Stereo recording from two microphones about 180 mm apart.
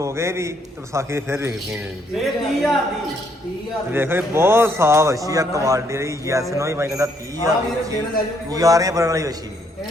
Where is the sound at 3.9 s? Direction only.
10° right (ahead or behind).